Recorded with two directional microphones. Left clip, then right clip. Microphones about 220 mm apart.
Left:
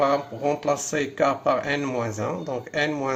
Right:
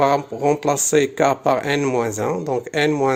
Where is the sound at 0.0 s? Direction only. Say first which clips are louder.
Right 5 dB; 50° right (ahead or behind).